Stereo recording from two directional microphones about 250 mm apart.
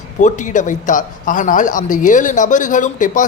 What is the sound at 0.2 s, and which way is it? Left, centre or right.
A man's voice, left.